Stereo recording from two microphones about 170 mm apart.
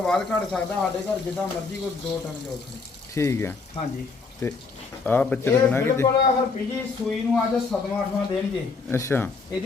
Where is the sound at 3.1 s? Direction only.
15° left (ahead or behind).